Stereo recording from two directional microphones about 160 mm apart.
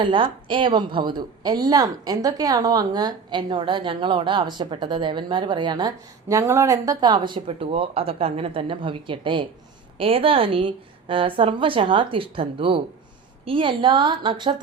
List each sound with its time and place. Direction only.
0.0 s a woman's voice: 30° right (ahead or behind)